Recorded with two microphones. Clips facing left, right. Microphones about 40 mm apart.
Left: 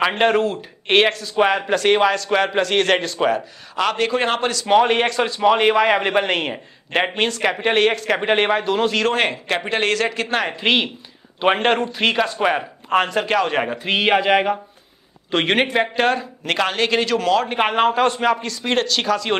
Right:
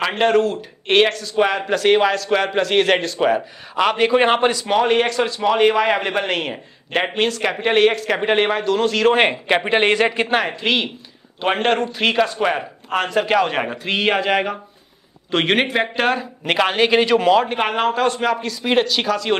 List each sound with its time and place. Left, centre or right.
0.0 s a man's voice: centre
4.6 s a man's voice: centre
9.0 s speech: centre
10.5 s a man's voice: centre
17.5 s a man's voice: centre